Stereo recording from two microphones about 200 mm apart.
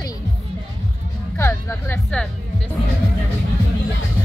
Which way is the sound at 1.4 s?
10° left (ahead or behind).